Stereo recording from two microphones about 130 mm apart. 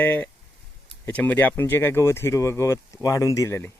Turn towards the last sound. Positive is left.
turn(degrees=20)  # may be behind; listen again after turning